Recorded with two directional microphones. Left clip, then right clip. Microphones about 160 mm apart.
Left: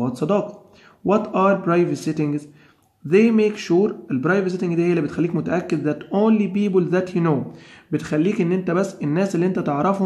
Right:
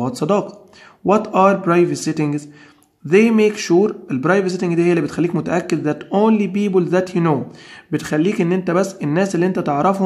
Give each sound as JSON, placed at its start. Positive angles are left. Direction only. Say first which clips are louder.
{"t": 0.0, "sound": "a man's voice", "louder": "right 3 dB", "side_deg": -25}